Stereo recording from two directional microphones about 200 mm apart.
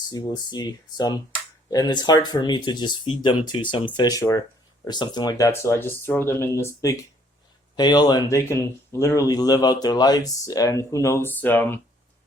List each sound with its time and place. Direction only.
0.1 s speech: 20° left (ahead or behind)